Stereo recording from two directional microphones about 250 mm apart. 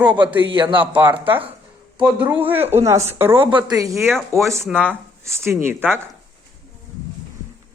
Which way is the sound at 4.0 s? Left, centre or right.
Centre.